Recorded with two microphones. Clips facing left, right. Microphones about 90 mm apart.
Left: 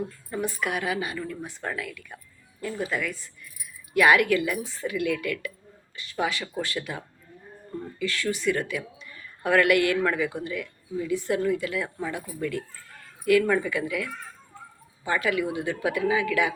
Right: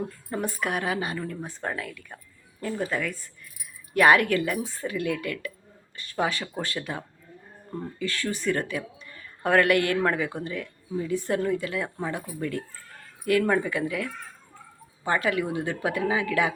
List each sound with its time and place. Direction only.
0.3 s speech: 40° right (ahead or behind)